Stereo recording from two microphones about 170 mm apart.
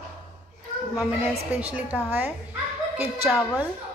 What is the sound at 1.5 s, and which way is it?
A woman's voice, 10° right (ahead or behind).